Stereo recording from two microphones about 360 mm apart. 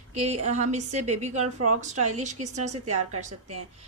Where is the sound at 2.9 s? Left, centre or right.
Centre.